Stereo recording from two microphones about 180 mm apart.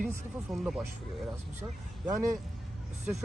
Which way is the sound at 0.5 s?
Centre (ahead or behind).